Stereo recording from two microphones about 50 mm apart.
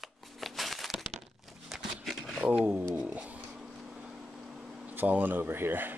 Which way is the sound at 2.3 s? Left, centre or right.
Centre.